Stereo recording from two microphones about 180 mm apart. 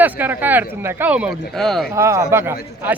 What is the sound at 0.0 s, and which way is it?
Speech, 10° right (ahead or behind).